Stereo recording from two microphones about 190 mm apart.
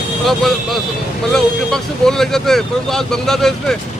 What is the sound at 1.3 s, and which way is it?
Speech, centre (ahead or behind).